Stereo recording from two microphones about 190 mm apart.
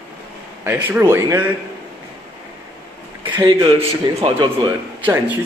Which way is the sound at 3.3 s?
25° right (ahead or behind).